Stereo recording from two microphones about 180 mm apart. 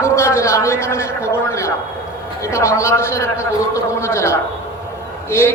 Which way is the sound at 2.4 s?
15° left (ahead or behind).